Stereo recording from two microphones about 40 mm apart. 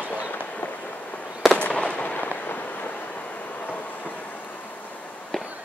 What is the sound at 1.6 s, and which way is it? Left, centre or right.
Fireworks, left.